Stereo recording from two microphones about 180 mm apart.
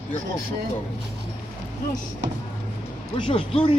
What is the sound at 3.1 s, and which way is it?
Speech, 30° left (ahead or behind).